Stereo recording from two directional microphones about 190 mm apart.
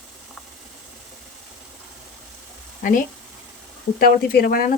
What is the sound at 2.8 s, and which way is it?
Speech, 45° left (ahead or behind).